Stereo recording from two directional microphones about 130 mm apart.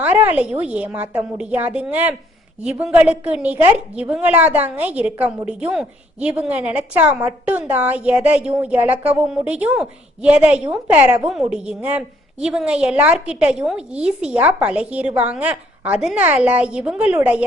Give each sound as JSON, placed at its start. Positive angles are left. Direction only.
{"t": 0.0, "sound": "a woman's voice", "side_deg": -15}